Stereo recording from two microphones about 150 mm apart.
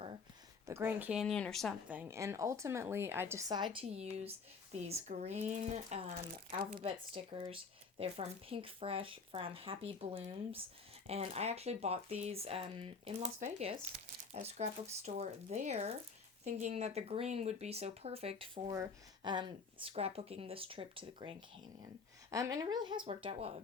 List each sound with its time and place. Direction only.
0.7 s a woman's voice: 15° right (ahead or behind)
1.2 s speech: 5° left (ahead or behind)
1.9 s a woman's voice: 15° right (ahead or behind)
3.5 s speech: 30° right (ahead or behind); by 6.1 s 50° right (ahead or behind)
6.7 s speech: 35° right (ahead or behind)
19.9 s speech: 45° right (ahead or behind)
22.3 s speech: 20° right (ahead or behind); by 23.5 s 40° right (ahead or behind)